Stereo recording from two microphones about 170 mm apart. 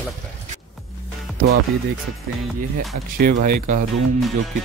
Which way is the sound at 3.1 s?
55° right (ahead or behind).